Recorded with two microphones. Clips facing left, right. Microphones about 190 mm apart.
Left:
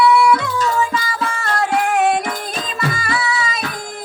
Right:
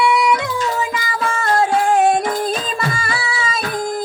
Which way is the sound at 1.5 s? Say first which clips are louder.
Right 3 dB; 30° right (ahead or behind).